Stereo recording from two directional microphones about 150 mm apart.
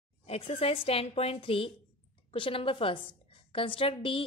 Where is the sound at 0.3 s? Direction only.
40° left (ahead or behind).